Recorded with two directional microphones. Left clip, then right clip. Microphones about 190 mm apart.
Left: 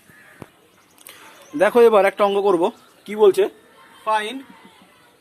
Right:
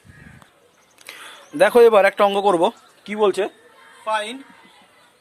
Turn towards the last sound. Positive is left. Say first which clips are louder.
# left 2 dB
turn(degrees=-15)  # may be behind; listen again after turning